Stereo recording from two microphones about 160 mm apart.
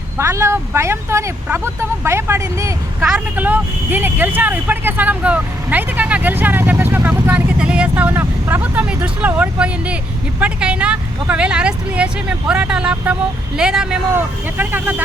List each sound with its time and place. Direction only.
0.2 s speech: 15° right (ahead or behind)
3.0 s speech: 5° right (ahead or behind)